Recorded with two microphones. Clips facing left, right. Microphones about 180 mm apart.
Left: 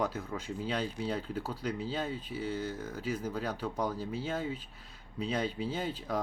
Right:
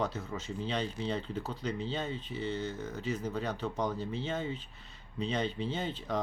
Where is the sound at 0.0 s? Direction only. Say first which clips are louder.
Left 1 dB; 10° left (ahead or behind).